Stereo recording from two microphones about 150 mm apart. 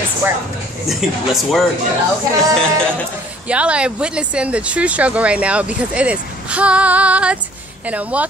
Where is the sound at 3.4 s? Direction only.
10° right (ahead or behind).